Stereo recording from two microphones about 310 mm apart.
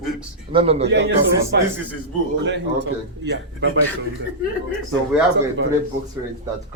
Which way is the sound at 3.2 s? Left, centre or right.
Right.